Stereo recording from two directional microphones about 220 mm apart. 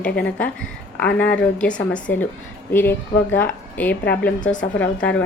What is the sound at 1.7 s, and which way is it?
Speech, 20° left (ahead or behind).